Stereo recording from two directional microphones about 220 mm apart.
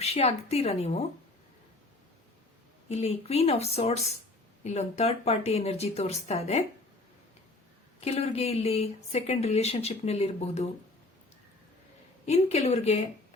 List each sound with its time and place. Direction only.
0.0 s speech: 30° left (ahead or behind)
2.9 s speech: 30° left (ahead or behind)
8.0 s speech: 30° left (ahead or behind)
12.2 s speech: 30° left (ahead or behind)